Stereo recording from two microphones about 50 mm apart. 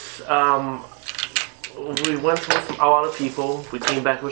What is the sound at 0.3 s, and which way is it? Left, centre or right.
Speech, centre.